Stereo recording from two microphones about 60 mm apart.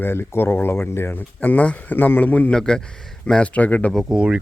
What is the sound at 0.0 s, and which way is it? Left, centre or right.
Speech, left.